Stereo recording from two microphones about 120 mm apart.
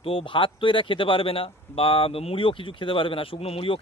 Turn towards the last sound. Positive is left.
turn(degrees=50)  # may be behind; listen again after turning